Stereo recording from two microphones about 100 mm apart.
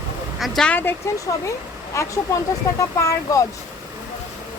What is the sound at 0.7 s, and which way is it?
Speech, 20° left (ahead or behind).